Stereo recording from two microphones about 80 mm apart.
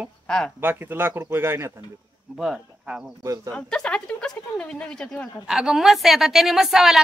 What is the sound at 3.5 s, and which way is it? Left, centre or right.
A woman's voice, centre.